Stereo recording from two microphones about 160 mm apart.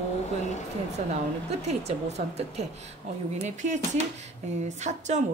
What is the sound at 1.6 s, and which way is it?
Speech, 45° right (ahead or behind).